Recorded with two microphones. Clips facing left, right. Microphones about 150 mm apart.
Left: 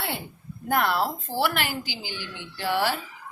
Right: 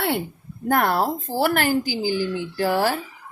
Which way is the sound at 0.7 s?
50° right (ahead or behind).